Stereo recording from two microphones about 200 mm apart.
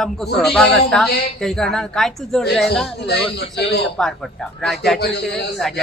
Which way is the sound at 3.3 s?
60° left (ahead or behind).